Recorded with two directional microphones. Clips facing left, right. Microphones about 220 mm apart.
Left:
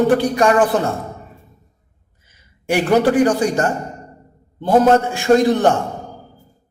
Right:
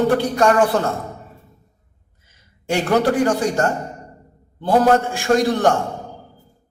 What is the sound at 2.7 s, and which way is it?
A man's voice, 20° left (ahead or behind).